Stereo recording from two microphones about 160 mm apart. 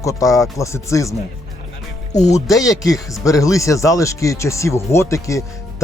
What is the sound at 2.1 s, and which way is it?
Speech, 45° left (ahead or behind).